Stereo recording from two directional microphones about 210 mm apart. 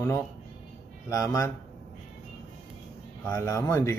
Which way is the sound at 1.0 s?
15° left (ahead or behind).